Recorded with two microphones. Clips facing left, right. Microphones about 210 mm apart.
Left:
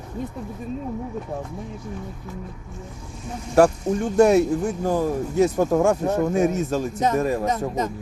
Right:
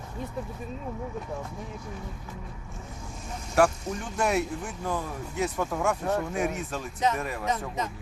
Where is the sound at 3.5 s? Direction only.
40° left (ahead or behind).